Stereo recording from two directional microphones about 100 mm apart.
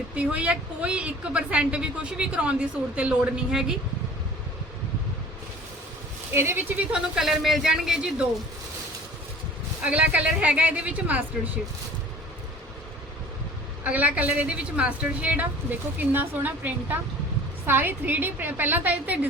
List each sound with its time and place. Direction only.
0.1 s a woman's voice: 10° right (ahead or behind)
6.3 s a woman's voice: 25° right (ahead or behind)
6.9 s a man's voice: 5° right (ahead or behind)
9.8 s a woman's voice: 15° right (ahead or behind)
13.8 s a woman's voice: 15° right (ahead or behind)